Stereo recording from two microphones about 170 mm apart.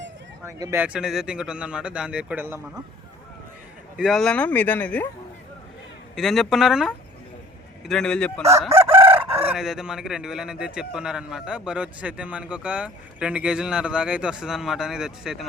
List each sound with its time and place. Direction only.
0.4 s speech: 15° right (ahead or behind)
0.9 s a man's voice: 5° right (ahead or behind)
3.9 s speech: centre (ahead or behind)
6.1 s a man's voice: centre (ahead or behind)
8.7 s chicken: 15° right (ahead or behind)
9.4 s a man's voice: 5° right (ahead or behind)